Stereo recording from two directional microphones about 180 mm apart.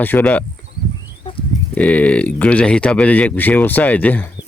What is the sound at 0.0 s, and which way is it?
Speech, 10° left (ahead or behind).